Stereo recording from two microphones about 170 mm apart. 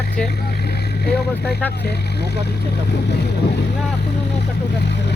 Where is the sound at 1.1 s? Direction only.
70° left (ahead or behind).